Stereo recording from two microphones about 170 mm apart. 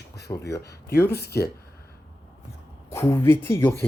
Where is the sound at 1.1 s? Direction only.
70° left (ahead or behind).